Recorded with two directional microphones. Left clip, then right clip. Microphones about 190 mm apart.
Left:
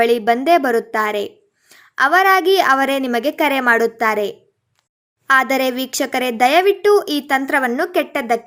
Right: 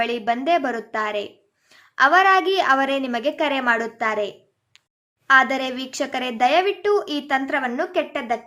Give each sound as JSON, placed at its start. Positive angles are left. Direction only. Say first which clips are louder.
{"t": 0.0, "sound": "a woman's voice", "louder": "left 7 dB", "side_deg": 25}